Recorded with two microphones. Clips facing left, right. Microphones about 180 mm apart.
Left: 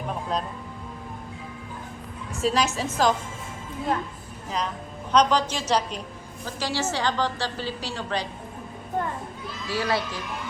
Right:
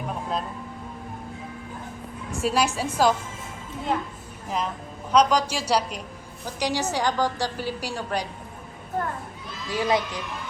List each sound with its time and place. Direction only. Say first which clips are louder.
0.1 s music: left 1 dB; 5° right (ahead or behind)
2.4 s a woman's voice: even; 10° right (ahead or behind)
4.4 s a woman's voice: right 1 dB; 5° right (ahead or behind)
9.6 s a woman's voice: right 2 dB; 20° right (ahead or behind)